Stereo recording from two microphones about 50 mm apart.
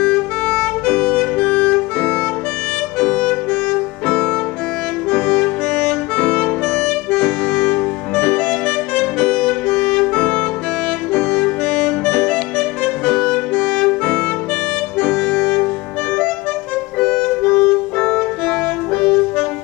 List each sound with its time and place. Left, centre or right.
0.0 s music: centre
0.8 s music: left
3.0 s music: centre
6.1 s music: centre
8.5 s saxophone: centre
11.1 s music: centre
13.6 s saxophone: centre
15.0 s music: centre
17.0 s music: centre